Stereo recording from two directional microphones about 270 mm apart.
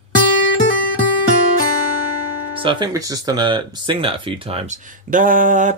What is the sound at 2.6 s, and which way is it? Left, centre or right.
Speech, centre.